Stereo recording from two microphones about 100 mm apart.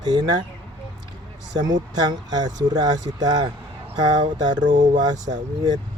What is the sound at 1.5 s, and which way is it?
Speech, 45° right (ahead or behind).